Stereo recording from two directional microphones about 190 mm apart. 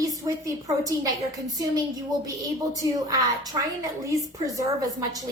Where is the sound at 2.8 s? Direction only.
20° right (ahead or behind).